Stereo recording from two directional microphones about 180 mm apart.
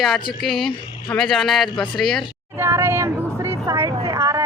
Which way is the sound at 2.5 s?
15° right (ahead or behind).